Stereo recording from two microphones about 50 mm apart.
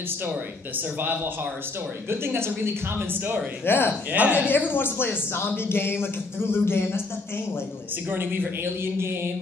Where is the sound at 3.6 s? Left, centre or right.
Left.